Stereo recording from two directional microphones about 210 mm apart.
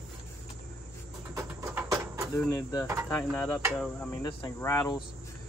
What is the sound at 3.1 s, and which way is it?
Cricket, 5° left (ahead or behind).